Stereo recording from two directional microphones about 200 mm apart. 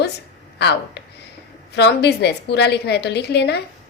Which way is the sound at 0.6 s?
55° left (ahead or behind).